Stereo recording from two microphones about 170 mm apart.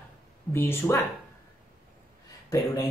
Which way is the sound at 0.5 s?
15° left (ahead or behind).